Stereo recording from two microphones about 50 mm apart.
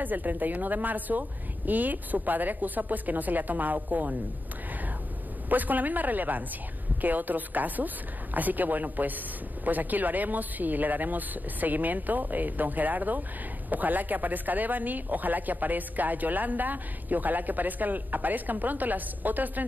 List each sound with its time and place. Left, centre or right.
0.0 s speech: right
5.5 s speech: right